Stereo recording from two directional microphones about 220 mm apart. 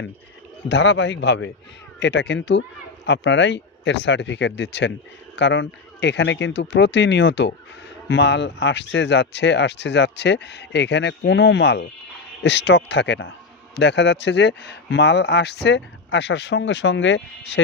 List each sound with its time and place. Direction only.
0.7 s speech: 55° left (ahead or behind)